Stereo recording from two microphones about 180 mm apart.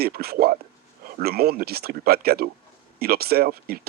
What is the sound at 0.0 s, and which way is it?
Speech, 60° right (ahead or behind).